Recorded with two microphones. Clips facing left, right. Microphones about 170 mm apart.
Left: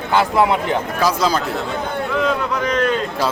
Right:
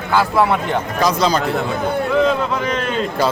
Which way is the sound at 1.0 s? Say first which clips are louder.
Right 3 dB; 5° left (ahead or behind).